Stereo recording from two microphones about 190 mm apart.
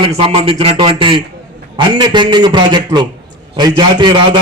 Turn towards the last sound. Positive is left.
turn(degrees=-25)  # may be behind; listen again after turning